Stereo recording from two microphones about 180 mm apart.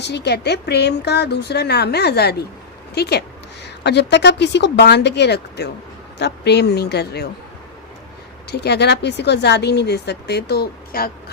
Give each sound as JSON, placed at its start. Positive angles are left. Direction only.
{"t": 0.0, "sound": "a woman's voice", "side_deg": 70}
{"t": 8.4, "sound": "speech", "side_deg": 65}